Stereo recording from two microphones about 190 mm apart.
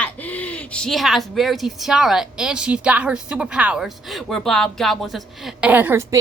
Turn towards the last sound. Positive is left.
turn(degrees=-10)  # may be behind; listen again after turning